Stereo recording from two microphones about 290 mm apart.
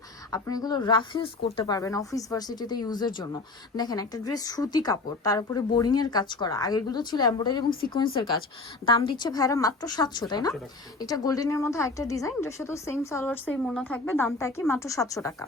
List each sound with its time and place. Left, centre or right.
0.3 s speech: centre
7.7 s speech: left
8.9 s speech: centre